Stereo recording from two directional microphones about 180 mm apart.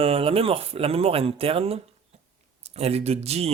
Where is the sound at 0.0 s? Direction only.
30° right (ahead or behind).